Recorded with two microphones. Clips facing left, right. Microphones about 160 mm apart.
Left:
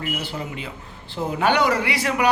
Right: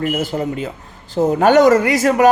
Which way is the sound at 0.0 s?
45° right (ahead or behind).